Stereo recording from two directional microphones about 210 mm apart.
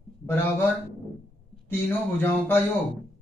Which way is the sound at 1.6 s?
10° left (ahead or behind).